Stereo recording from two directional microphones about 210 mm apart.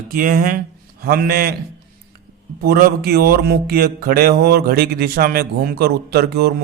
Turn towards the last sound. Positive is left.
turn(degrees=-50)  # may be behind; listen again after turning